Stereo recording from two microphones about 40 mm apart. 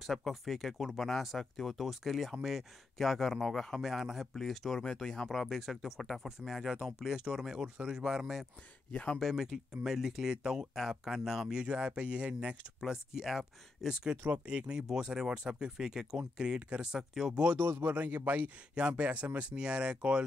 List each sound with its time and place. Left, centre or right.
0.0 s speech: centre
4.4 s speech: centre
4.8 s speech: centre
5.3 s speech: centre
8.9 s speech: left
9.2 s speech: centre
11.5 s speech: right
12.8 s speech: centre
17.6 s a man's voice: right
17.8 s a man's voice: right
18.8 s speech: right